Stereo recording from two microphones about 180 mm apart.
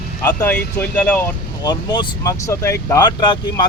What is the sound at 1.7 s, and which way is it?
Speech, 25° left (ahead or behind).